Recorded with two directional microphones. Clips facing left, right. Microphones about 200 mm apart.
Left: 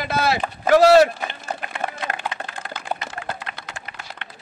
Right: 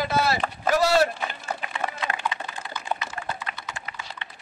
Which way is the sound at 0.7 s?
85° left.